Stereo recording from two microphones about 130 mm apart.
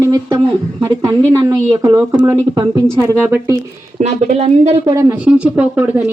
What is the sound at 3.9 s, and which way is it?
Speech, 60° right (ahead or behind).